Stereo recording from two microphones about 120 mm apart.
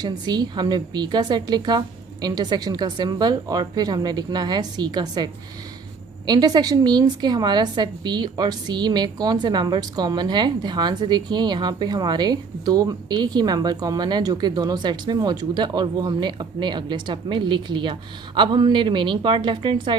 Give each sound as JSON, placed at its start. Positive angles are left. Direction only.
{"t": 0.0, "sound": "a woman's voice", "side_deg": -35}